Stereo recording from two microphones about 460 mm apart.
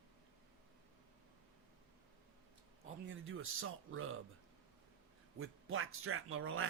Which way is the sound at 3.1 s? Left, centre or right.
Right.